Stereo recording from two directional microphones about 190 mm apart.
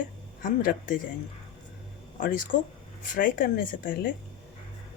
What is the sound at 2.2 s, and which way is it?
Speech, 45° left (ahead or behind).